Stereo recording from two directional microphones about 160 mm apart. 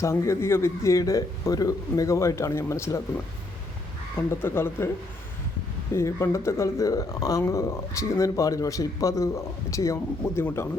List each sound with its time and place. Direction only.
0.0 s speech: 20° left (ahead or behind)
4.4 s speech: 15° left (ahead or behind)
5.9 s speech: 15° left (ahead or behind)